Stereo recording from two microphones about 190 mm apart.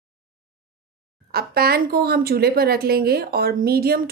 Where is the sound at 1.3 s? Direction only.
55° right (ahead or behind).